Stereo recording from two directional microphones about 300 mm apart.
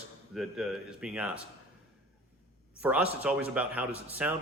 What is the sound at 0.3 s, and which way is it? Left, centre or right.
A man's voice, centre.